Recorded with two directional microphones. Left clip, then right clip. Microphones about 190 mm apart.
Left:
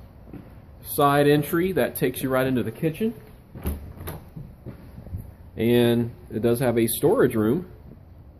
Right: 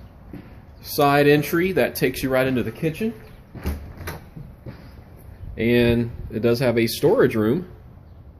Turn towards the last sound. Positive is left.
turn(degrees=0)  # may be behind; listen again after turning